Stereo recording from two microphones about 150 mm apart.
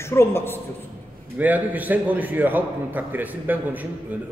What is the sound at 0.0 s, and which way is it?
Speech, 15° left (ahead or behind).